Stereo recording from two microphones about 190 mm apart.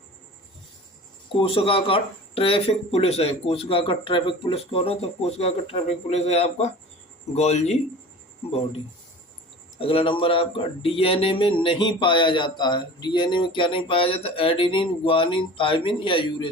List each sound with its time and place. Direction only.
1.4 s speech: 30° left (ahead or behind)
9.7 s speech: 30° left (ahead or behind)